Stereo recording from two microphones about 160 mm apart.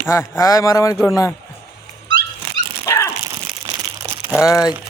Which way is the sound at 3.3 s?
25° right (ahead or behind).